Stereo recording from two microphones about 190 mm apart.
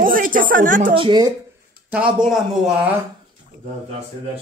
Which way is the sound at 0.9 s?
25° right (ahead or behind).